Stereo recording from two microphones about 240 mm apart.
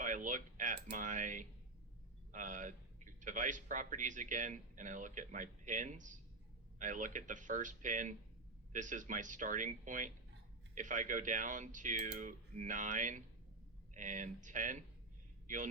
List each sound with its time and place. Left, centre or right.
0.0 s a man's voice: right